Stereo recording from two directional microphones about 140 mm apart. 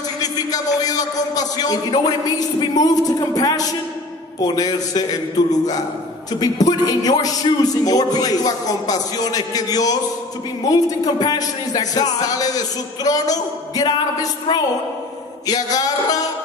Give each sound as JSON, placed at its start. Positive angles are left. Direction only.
{"t": 0.2, "sound": "a man's voice", "side_deg": 25}
{"t": 15.4, "sound": "a man's voice", "side_deg": 25}